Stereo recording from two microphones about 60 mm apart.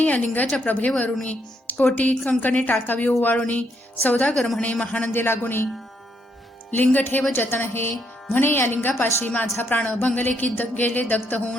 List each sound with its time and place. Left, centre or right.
0.0 s a woman's voice: left
4.4 s a man's voice: centre
4.6 s speech: left
5.1 s a woman's voice: left
6.7 s a woman's voice: left